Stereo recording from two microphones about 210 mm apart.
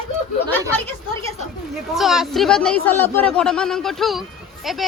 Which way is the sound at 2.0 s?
Centre (ahead or behind).